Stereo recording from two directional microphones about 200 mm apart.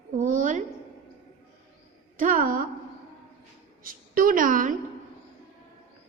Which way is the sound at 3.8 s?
45° right (ahead or behind).